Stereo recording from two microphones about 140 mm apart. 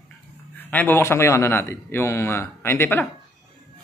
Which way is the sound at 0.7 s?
15° left (ahead or behind).